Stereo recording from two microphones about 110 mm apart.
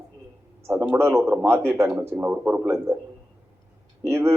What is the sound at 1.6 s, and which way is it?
Speech, 20° right (ahead or behind).